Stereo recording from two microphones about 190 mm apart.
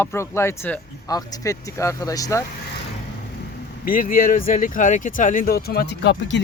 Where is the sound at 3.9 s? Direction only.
45° left (ahead or behind).